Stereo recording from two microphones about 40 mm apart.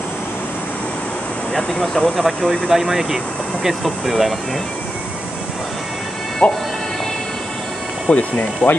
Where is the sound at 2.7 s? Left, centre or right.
Centre.